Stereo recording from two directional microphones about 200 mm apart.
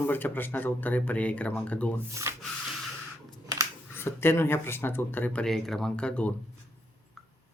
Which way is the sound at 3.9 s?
10° left (ahead or behind).